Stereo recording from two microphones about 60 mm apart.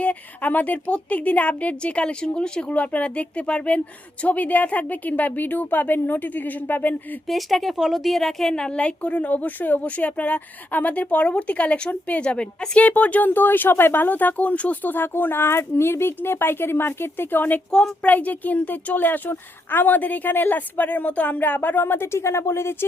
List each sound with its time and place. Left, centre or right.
0.0 s a woman's voice: left
7.3 s a woman's voice: centre; by 22.9 s left